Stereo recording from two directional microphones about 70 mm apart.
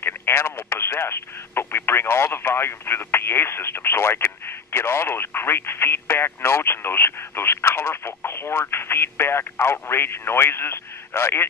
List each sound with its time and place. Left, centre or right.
0.0 s speech: left